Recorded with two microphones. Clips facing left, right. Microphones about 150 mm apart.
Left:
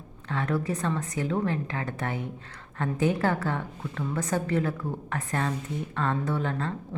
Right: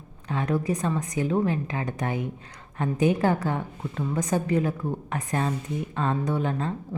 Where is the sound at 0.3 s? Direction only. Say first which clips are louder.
Right 2 dB; 15° right (ahead or behind).